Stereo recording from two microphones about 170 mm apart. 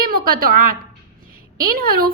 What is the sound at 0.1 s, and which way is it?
A woman's voice, 60° right (ahead or behind).